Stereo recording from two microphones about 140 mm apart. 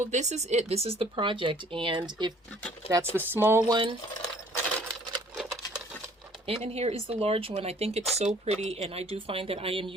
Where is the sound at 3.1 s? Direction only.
15° right (ahead or behind).